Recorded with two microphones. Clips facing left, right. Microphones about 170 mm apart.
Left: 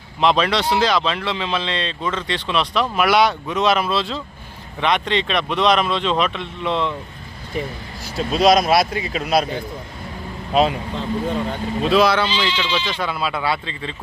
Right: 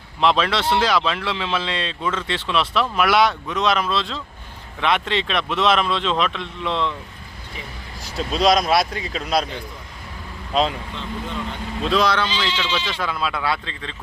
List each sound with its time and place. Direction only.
0.2 s speech: centre (ahead or behind)
8.1 s speech: 5° left (ahead or behind)
10.5 s speech: 10° left (ahead or behind)
10.9 s speech: 40° left (ahead or behind)
11.8 s speech: 5° left (ahead or behind)